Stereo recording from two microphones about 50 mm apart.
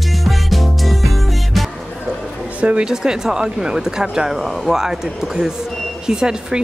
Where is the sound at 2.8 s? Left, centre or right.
Centre.